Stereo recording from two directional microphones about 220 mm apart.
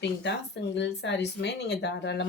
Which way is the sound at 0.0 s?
50° left (ahead or behind).